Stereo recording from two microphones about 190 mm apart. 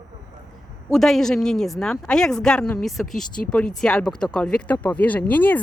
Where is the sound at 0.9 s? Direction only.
Centre (ahead or behind).